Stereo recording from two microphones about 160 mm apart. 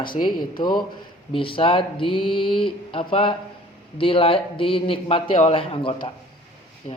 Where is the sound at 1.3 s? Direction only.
35° left (ahead or behind).